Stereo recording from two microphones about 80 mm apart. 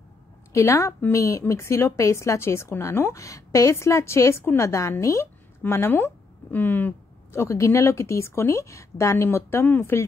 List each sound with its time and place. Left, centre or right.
0.5 s a woman's voice: left
7.3 s a woman's voice: left